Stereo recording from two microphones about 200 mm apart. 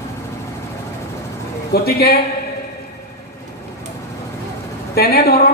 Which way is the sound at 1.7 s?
50° left (ahead or behind).